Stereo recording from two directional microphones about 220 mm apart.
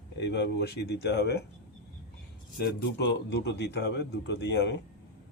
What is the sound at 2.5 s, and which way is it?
A man's voice, 45° left (ahead or behind).